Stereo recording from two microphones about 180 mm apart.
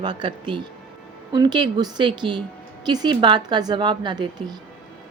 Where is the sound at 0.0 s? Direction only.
25° right (ahead or behind).